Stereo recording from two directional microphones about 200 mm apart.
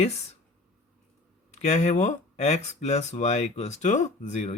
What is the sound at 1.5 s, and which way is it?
Speech, 35° left (ahead or behind).